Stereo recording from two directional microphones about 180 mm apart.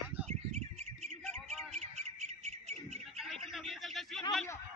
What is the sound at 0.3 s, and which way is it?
Bird, 40° right (ahead or behind).